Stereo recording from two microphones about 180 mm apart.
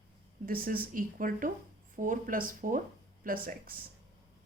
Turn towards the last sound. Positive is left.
turn(degrees=-55)  # may be behind; listen again after turning